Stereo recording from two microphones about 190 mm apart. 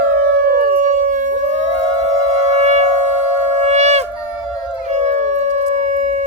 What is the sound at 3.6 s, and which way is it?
Shofar, 35° right (ahead or behind).